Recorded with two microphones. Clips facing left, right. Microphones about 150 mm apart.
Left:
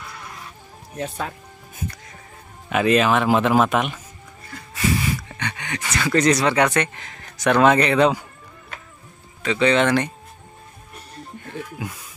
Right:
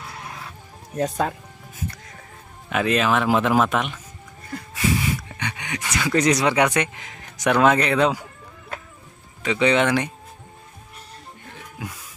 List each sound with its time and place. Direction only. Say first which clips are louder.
0.9 s speech: right 5 dB; 40° right (ahead or behind)
2.7 s speech: left 3 dB; centre (ahead or behind)
5.4 s speech: left 1 dB; 10° right (ahead or behind)
9.4 s speech: left 1 dB; 15° right (ahead or behind)